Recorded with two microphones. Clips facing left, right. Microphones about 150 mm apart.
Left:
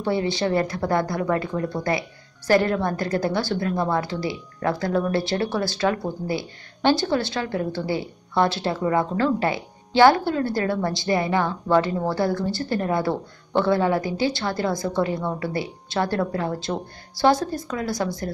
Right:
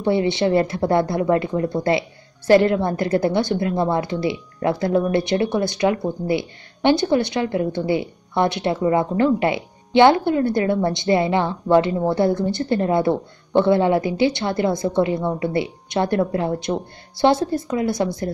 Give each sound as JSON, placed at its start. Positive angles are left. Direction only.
{"t": 0.0, "sound": "speech", "side_deg": -20}